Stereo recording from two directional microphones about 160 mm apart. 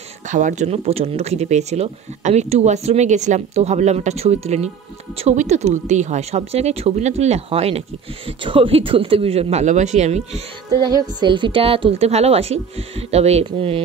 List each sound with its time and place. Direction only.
0.3 s a woman's voice: 50° right (ahead or behind)
10.7 s a woman's voice: 25° right (ahead or behind)